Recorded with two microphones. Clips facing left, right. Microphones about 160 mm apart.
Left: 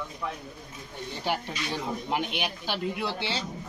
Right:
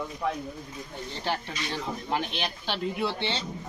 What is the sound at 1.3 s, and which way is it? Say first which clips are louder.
Speech: left 1 dB; 15° left (ahead or behind).